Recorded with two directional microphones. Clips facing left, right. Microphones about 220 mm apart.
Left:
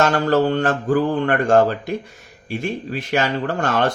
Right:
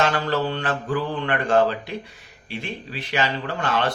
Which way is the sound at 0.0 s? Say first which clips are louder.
Left 6 dB; 45° left (ahead or behind).